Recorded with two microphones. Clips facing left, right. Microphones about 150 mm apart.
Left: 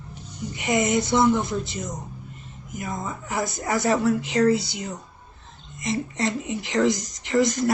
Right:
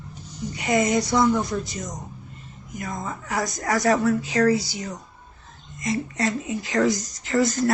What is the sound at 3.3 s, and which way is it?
A woman's voice, 25° left (ahead or behind).